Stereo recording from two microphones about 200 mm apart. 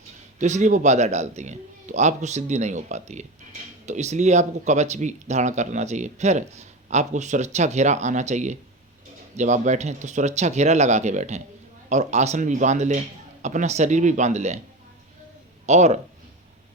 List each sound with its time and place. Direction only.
0.3 s speech: 35° right (ahead or behind)
15.6 s speech: 35° right (ahead or behind)